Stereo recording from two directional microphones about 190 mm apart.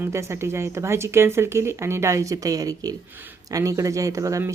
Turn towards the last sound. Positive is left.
turn(degrees=-15)  # may be behind; listen again after turning